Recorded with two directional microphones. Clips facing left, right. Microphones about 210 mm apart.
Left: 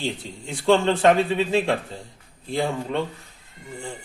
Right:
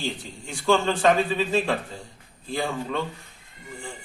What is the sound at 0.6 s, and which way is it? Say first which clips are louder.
A man's voice: left 3 dB; 25° left (ahead or behind).